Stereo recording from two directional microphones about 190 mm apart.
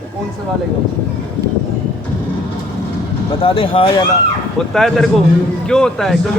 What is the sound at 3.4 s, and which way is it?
Speech, 30° left (ahead or behind).